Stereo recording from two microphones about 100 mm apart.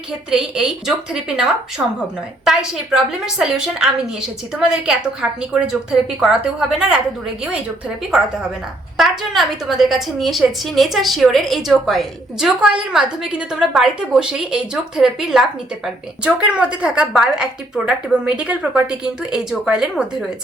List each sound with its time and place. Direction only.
0.1 s a woman's voice: 5° right (ahead or behind)
1.8 s speech: 20° right (ahead or behind)
2.4 s a woman's voice: 5° right (ahead or behind)
9.0 s a woman's voice: centre (ahead or behind)